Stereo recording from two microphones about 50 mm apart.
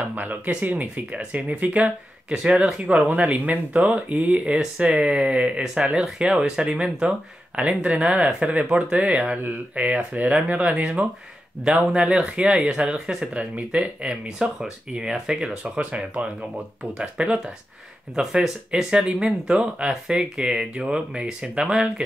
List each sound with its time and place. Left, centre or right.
0.1 s speech: right
10.7 s speech: centre
13.3 s speech: right
15.6 s speech: right
18.2 s speech: centre